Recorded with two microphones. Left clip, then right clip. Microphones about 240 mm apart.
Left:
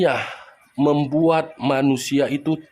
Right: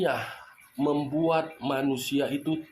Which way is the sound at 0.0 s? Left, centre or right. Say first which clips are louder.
Left 8 dB; left.